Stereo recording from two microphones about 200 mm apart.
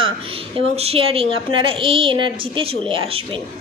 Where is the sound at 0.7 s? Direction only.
30° right (ahead or behind).